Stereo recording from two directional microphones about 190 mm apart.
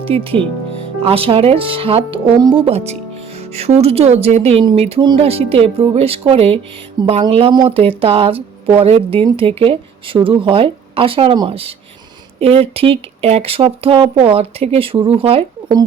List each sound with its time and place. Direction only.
0.0 s speech: 30° right (ahead or behind)